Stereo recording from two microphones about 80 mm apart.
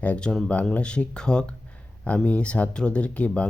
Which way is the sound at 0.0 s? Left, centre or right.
Centre.